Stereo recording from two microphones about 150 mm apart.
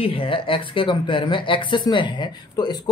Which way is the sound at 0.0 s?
35° left (ahead or behind).